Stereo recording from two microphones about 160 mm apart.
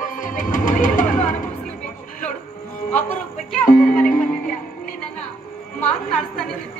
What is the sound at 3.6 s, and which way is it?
Music, 55° left (ahead or behind).